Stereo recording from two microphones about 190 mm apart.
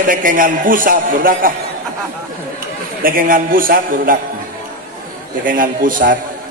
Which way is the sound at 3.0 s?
50° right (ahead or behind).